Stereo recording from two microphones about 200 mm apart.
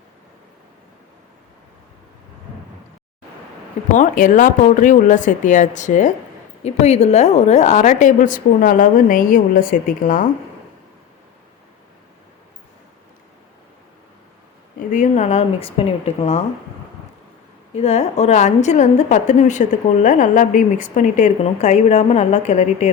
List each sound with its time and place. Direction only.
3.9 s a woman's voice: 40° left (ahead or behind)
14.8 s a woman's voice: 40° left (ahead or behind)
17.7 s a woman's voice: 30° left (ahead or behind)